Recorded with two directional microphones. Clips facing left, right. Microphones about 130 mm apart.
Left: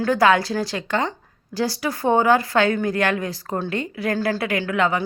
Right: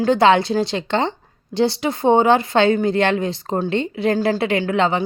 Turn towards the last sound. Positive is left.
turn(degrees=-25)  # may be behind; listen again after turning